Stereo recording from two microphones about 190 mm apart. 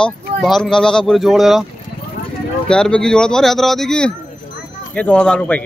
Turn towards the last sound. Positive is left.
turn(degrees=5)  # may be behind; listen again after turning